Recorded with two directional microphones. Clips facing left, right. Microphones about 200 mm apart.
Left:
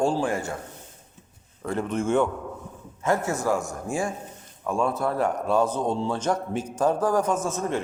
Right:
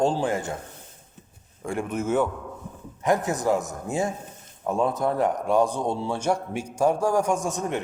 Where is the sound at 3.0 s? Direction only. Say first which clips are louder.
Right 1 dB; 15° right (ahead or behind).